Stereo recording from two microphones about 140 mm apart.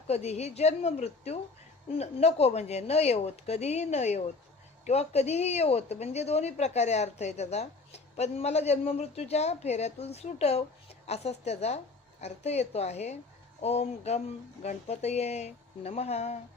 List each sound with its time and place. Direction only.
0.1 s speech: 50° left (ahead or behind)